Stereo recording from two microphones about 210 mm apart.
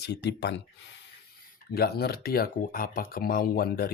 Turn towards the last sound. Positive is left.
turn(degrees=45)  # may be behind; listen again after turning